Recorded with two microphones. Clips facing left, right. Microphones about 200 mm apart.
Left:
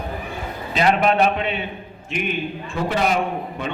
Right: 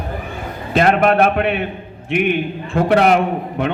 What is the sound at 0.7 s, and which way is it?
A man's voice, 50° right (ahead or behind).